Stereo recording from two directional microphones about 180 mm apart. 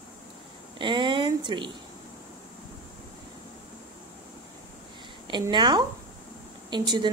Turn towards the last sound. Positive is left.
turn(degrees=-25)  # may be behind; listen again after turning